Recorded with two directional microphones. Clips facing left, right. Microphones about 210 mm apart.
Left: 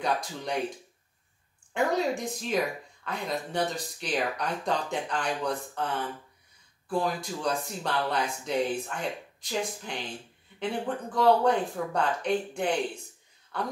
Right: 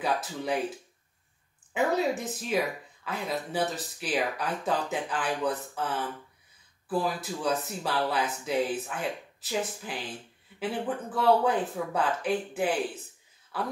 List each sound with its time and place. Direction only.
0.0 s speech: 5° right (ahead or behind)